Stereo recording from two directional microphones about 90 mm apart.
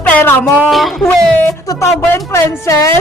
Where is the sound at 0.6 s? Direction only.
Centre (ahead or behind).